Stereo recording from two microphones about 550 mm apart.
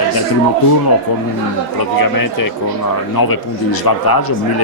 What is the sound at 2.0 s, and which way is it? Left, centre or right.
Speech, left.